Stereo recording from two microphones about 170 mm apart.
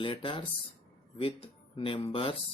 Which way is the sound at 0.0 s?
30° left (ahead or behind).